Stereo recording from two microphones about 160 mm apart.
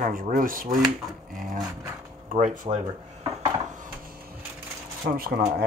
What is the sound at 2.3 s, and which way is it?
Speech, 50° right (ahead or behind).